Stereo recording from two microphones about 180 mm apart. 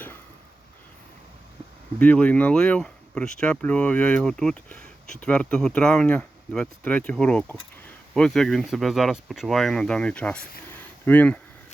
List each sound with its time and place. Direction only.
2.0 s speech: 5° left (ahead or behind)